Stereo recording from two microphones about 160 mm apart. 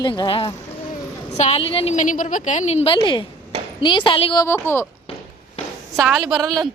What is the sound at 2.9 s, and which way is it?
A woman's voice, 30° left (ahead or behind).